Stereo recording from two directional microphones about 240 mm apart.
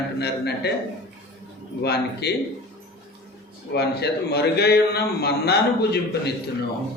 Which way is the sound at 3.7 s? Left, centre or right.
Left.